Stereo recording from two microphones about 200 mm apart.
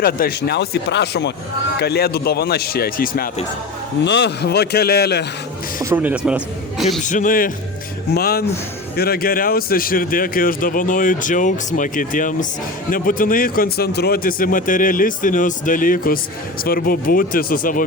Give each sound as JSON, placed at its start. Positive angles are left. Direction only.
{"t": 0.0, "sound": "a man's voice", "side_deg": 50}
{"t": 4.0, "sound": "a man's voice", "side_deg": 60}
{"t": 5.8, "sound": "a man's voice", "side_deg": -10}
{"t": 7.0, "sound": "a man's voice", "side_deg": 40}